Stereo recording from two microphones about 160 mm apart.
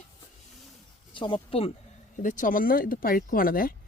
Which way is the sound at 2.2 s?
55° left (ahead or behind).